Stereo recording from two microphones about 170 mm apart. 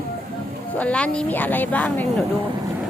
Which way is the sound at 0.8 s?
5° left (ahead or behind).